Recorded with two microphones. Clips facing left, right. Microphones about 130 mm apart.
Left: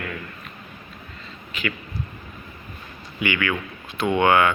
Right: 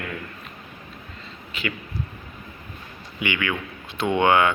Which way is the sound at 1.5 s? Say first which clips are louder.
Left 1 dB; 30° right (ahead or behind).